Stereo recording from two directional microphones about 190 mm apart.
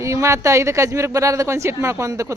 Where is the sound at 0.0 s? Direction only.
15° right (ahead or behind).